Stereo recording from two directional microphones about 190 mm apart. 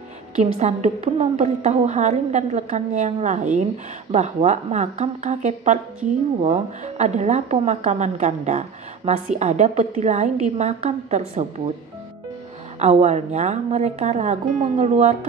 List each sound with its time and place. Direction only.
0.4 s speech: 35° right (ahead or behind)
12.7 s speech: 35° right (ahead or behind)